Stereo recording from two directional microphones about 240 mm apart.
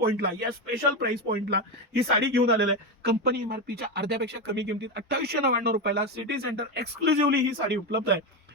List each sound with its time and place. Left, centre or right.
0.0 s a man's voice: right